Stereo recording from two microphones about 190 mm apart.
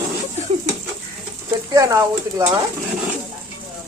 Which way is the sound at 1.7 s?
20° right (ahead or behind).